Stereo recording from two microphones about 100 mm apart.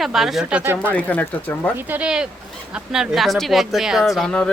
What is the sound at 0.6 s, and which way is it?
Speech, 20° right (ahead or behind).